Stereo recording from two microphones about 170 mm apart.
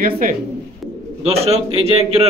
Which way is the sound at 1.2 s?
35° right (ahead or behind).